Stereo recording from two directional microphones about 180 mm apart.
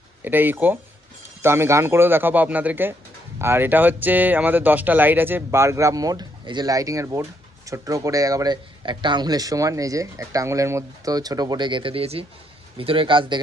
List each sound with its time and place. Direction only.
0.3 s speech: 10° right (ahead or behind); by 13.4 s 25° right (ahead or behind)